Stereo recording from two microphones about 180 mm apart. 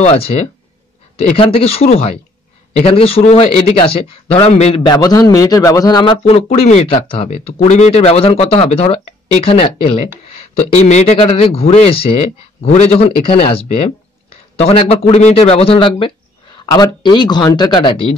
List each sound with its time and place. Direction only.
0.0 s a man's voice: 35° left (ahead or behind)